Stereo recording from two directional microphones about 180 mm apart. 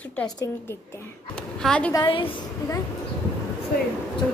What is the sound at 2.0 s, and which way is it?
Speech, 30° left (ahead or behind).